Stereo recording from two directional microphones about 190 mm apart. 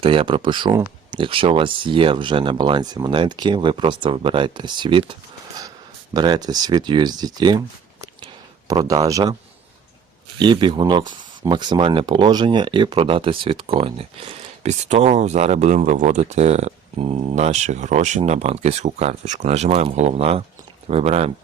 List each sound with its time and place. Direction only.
0.0 s speech: 30° right (ahead or behind)
6.1 s speech: 20° right (ahead or behind)
8.6 s speech: 20° right (ahead or behind)
10.3 s speech: 25° right (ahead or behind)